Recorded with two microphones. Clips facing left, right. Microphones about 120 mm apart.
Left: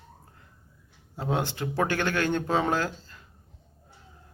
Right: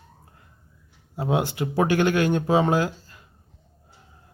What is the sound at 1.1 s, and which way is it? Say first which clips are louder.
Speech: right 5 dB; 15° right (ahead or behind).